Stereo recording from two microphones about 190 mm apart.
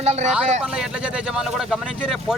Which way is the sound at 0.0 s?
35° right (ahead or behind).